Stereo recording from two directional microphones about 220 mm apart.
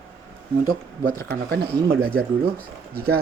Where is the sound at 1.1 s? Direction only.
45° right (ahead or behind).